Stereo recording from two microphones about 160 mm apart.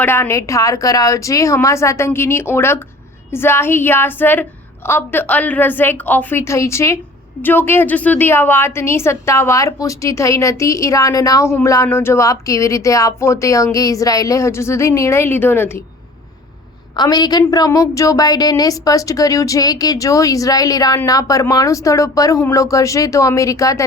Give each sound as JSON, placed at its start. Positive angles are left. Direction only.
{"t": 0.0, "sound": "a woman's voice", "side_deg": 15}
{"t": 17.0, "sound": "a woman's voice", "side_deg": 25}